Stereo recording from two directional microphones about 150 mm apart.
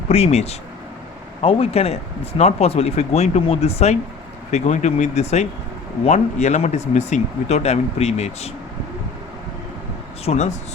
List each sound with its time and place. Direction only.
0.1 s speech: 45° left (ahead or behind)
10.2 s speech: 50° left (ahead or behind)